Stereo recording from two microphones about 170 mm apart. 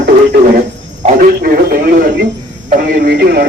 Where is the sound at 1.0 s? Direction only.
55° right (ahead or behind).